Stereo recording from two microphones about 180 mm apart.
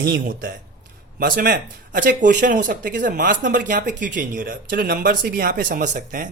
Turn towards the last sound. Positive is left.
turn(degrees=-45)  # may be behind; listen again after turning